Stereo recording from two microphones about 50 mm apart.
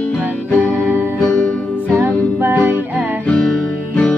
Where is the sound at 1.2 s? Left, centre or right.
Left.